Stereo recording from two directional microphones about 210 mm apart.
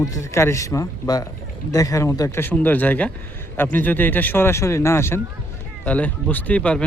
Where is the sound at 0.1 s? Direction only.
15° left (ahead or behind).